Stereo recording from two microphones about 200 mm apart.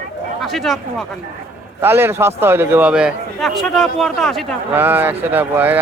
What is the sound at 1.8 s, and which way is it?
A man's voice, 10° right (ahead or behind).